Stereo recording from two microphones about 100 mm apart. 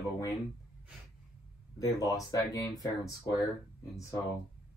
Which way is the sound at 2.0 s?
35° left (ahead or behind).